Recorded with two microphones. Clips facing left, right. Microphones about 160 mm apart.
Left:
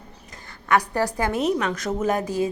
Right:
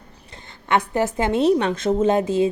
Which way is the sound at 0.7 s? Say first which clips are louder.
Right 1 dB; 25° right (ahead or behind).